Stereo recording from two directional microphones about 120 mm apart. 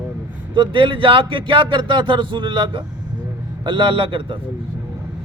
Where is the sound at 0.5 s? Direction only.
45° right (ahead or behind).